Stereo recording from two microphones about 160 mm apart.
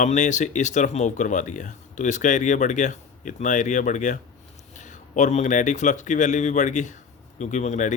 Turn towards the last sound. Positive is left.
turn(degrees=50)  # may be behind; listen again after turning